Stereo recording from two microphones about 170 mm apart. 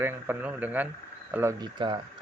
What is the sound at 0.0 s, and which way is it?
Speech, 10° right (ahead or behind).